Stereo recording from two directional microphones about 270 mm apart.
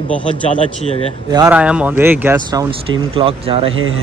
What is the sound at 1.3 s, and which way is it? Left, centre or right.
Speech, centre.